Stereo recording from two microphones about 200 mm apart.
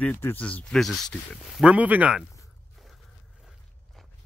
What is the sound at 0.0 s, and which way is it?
Speech, 10° left (ahead or behind).